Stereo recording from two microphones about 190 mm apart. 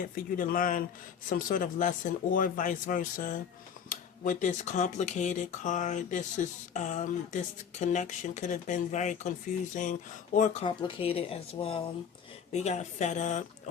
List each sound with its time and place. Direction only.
0.0 s speech: 45° left (ahead or behind)
10.7 s speech: 25° left (ahead or behind)